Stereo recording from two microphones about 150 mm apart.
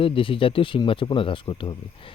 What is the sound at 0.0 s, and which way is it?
Speech, 35° left (ahead or behind).